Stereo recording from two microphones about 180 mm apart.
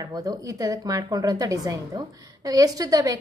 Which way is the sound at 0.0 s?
20° right (ahead or behind).